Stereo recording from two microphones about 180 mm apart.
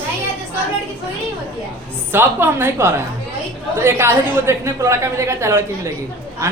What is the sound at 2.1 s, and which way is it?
A woman's voice, 10° right (ahead or behind).